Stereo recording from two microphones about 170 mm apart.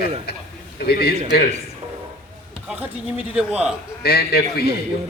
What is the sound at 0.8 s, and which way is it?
Speech, 65° left (ahead or behind).